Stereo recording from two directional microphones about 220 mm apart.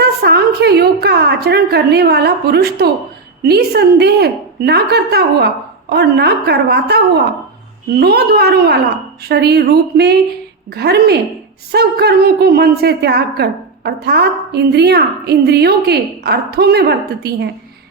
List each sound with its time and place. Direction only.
0.0 s speech: 45° right (ahead or behind)